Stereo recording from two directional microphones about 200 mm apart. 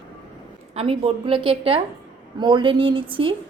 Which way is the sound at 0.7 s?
30° right (ahead or behind).